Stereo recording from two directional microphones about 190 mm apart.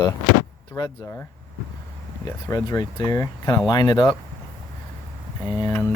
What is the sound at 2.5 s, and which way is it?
Speech, 20° left (ahead or behind).